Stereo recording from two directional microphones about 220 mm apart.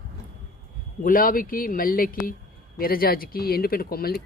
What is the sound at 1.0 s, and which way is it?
Speech, 40° left (ahead or behind).